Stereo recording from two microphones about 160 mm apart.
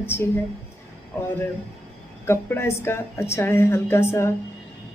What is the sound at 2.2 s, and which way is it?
A woman's voice, 15° left (ahead or behind).